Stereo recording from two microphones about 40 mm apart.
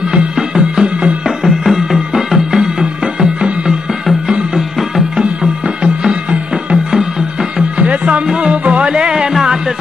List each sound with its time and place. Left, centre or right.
0.4 s music: centre
6.7 s music: centre
7.8 s music: right